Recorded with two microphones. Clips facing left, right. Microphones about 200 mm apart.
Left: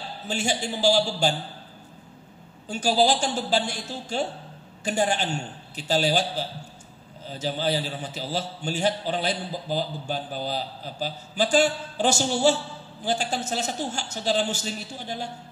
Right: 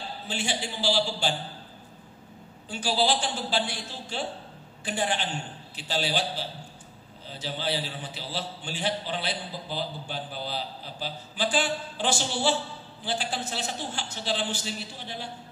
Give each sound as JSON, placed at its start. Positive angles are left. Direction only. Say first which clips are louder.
{"t": 0.3, "sound": "a man's voice", "louder": "left 5 dB", "side_deg": 45}
{"t": 2.7, "sound": "a man's voice", "louder": "left 5 dB", "side_deg": 45}